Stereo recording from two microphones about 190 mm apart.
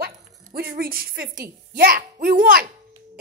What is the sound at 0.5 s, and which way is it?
A child's voice, 55° right (ahead or behind).